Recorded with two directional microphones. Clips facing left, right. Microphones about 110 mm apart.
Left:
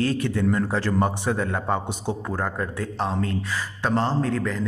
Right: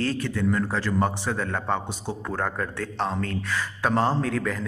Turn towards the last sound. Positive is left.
turn(degrees=0)  # may be behind; listen again after turning